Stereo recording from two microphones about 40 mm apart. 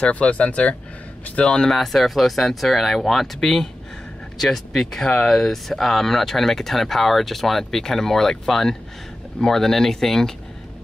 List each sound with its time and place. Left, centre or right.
0.0 s speech: left
1.4 s speech: centre